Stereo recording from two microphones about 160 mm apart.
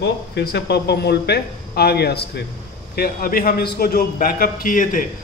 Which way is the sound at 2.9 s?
70° left (ahead or behind).